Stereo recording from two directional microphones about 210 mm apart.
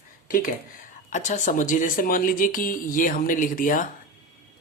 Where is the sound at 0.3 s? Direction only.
40° left (ahead or behind).